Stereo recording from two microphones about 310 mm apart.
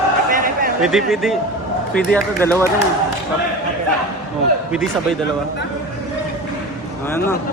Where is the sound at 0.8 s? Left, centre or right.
Centre.